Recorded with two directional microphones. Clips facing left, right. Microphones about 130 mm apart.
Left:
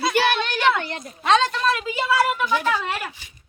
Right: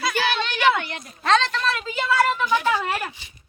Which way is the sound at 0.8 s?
35° left (ahead or behind).